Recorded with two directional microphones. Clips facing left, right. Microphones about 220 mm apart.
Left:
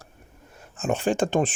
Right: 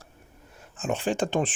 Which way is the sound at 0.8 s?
45° left (ahead or behind).